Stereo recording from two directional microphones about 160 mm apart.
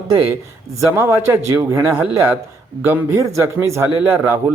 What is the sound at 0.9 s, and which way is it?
A man's voice, 15° right (ahead or behind).